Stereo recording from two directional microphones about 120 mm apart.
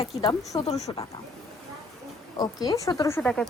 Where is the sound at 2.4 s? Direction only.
30° left (ahead or behind).